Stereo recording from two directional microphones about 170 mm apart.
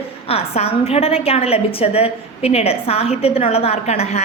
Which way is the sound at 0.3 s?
35° left (ahead or behind).